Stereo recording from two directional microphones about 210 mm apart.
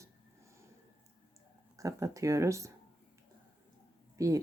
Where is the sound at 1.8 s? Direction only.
15° right (ahead or behind).